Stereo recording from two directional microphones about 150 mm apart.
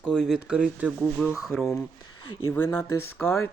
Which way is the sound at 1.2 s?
Centre (ahead or behind).